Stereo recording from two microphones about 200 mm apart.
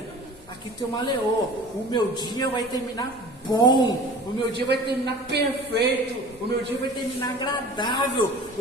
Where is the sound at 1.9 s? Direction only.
20° left (ahead or behind).